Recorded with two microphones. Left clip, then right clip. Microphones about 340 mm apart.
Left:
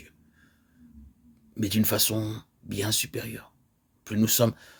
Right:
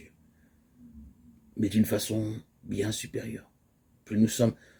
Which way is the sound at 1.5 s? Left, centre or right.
Left.